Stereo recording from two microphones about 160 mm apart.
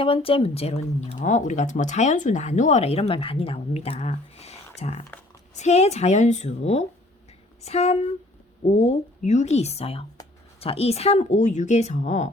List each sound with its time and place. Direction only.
0.0 s a woman's voice: 35° left (ahead or behind)
1.2 s a woman's voice: 50° left (ahead or behind)